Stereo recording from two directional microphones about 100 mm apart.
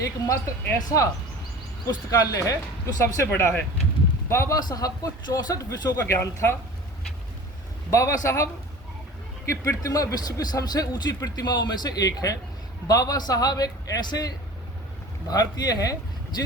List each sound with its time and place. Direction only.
0.0 s speech: 30° left (ahead or behind)
3.2 s speech: 20° left (ahead or behind)
4.3 s speech: 30° left (ahead or behind)
7.9 s speech: 30° left (ahead or behind)
9.5 s speech: 35° left (ahead or behind)